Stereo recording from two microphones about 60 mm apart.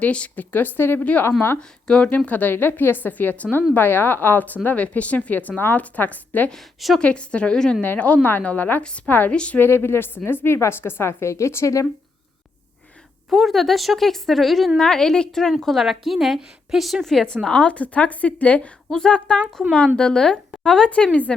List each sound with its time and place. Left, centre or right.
0.0 s a woman's voice: left
6.5 s a woman's voice: centre
7.0 s a woman's voice: centre
8.8 s speech: centre
9.0 s speech: left
9.3 s speech: centre
9.6 s a woman's voice: left
13.3 s a woman's voice: centre
17.4 s a woman's voice: centre
18.9 s speech: centre